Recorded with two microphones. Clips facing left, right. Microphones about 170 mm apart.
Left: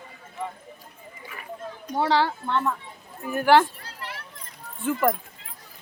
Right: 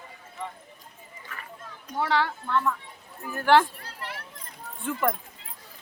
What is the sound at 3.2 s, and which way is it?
Speech, 20° left (ahead or behind).